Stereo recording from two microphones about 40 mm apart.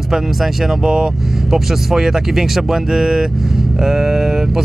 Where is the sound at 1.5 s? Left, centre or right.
Centre.